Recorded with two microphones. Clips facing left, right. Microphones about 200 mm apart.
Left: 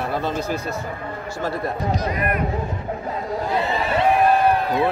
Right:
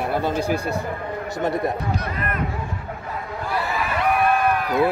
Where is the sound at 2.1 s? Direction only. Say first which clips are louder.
Left 4 dB; 15° left (ahead or behind).